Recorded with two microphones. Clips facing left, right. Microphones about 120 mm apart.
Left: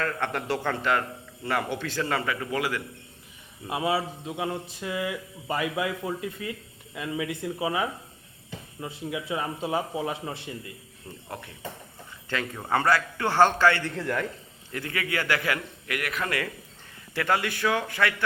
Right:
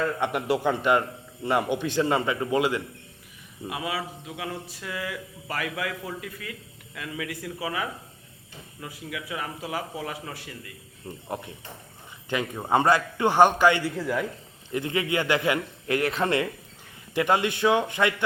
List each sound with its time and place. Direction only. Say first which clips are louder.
0.0 s a man's voice: right 3 dB; 15° right (ahead or behind)
3.7 s a man's voice: left 5 dB; 25° left (ahead or behind)
11.1 s a man's voice: right 4 dB; 10° right (ahead or behind)
12.3 s a man's voice: right 3 dB; 20° right (ahead or behind)
13.9 s a man's voice: right 1 dB; 5° right (ahead or behind)
14.7 s a man's voice: right 5 dB; 20° right (ahead or behind)